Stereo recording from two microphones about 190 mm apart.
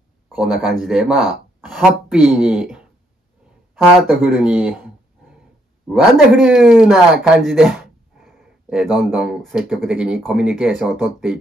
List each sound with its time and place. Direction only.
0.4 s speech: centre (ahead or behind)